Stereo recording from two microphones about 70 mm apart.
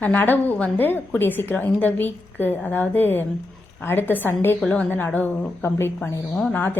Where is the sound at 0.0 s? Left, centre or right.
Left.